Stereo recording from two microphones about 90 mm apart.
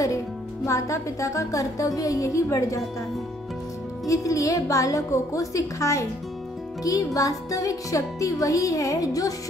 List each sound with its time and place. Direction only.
0.7 s speech: 35° left (ahead or behind)
4.0 s speech: 35° left (ahead or behind)
7.2 s speech: 40° left (ahead or behind)